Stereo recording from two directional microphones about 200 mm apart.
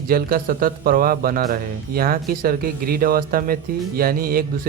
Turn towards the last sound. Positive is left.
turn(degrees=-45)  # may be behind; listen again after turning